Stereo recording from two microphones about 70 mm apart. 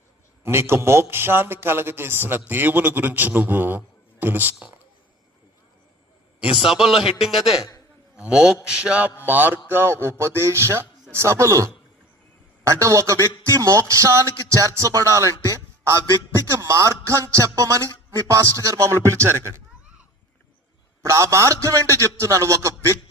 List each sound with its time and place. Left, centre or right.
0.4 s a man's voice: right
6.7 s speech: centre
8.1 s a man's voice: centre
8.6 s mantra: centre
9.2 s a man's voice: right
9.6 s a sound: right
11.1 s a man's voice: right
15.4 s a sound: right
16.4 s a man's voice: right
21.0 s a man's voice: right